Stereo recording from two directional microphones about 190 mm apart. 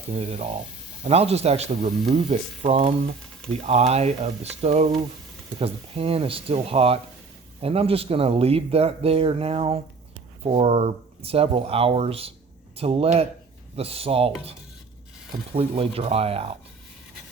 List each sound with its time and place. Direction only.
0.2 s speech: 30° right (ahead or behind)
15.5 s speech: 30° right (ahead or behind)